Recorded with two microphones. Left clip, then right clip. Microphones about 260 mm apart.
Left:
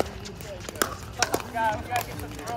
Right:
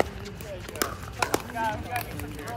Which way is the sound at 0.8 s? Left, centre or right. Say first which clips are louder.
Left 2 dB; centre.